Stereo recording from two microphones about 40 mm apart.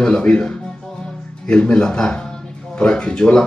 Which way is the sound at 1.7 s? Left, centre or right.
Left.